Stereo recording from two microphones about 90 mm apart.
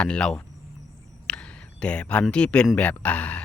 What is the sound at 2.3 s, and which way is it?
Speech, 10° left (ahead or behind).